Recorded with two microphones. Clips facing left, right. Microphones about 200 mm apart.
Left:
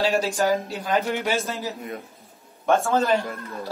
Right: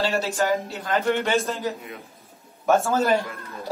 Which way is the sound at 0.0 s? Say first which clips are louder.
Left 2 dB; 15° left (ahead or behind).